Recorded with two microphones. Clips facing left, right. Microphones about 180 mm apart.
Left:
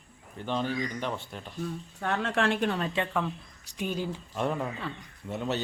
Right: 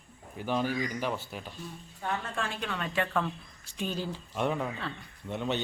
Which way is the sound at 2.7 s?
30° left (ahead or behind).